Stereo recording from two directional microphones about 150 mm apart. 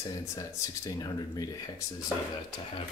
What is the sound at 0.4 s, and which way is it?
Speech, 25° left (ahead or behind).